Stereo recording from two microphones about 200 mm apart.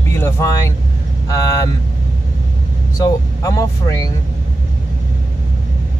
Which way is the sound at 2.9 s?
15° left (ahead or behind).